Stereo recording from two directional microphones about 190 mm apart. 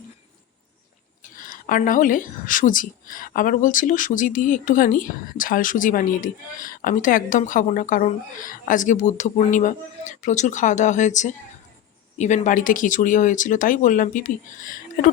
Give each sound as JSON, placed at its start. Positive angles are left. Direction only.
{"t": 1.2, "sound": "a woman's voice", "side_deg": 45}